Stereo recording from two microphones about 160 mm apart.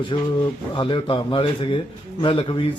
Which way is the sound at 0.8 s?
30° left (ahead or behind).